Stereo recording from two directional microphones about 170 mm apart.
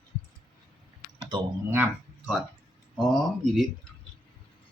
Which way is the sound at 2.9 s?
Centre (ahead or behind).